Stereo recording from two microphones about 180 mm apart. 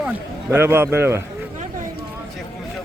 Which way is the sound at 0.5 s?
15° right (ahead or behind).